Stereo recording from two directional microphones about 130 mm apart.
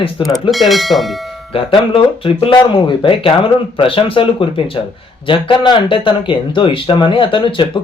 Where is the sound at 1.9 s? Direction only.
45° left (ahead or behind).